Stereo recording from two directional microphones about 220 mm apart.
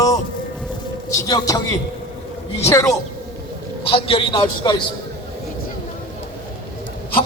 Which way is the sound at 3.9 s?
25° left (ahead or behind).